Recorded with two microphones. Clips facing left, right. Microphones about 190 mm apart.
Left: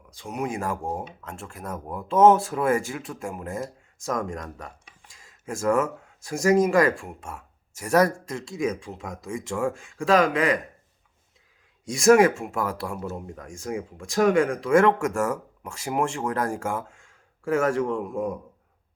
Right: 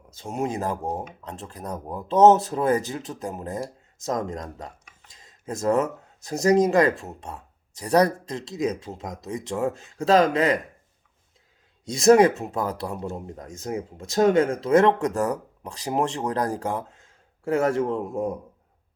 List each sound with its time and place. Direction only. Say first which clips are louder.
0.2 s speech: right 2 dB; 25° right (ahead or behind)
5.1 s a sound: right 1 dB; 20° right (ahead or behind)
6.1 s speech: right 1 dB; 20° right (ahead or behind)
11.9 s speech: right 1 dB; 20° right (ahead or behind)
17.0 s a sound: right 1 dB; 20° right (ahead or behind)
17.9 s speech: right 1 dB; 25° right (ahead or behind)